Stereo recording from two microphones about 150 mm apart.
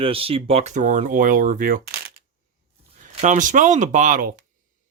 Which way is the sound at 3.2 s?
55° right (ahead or behind).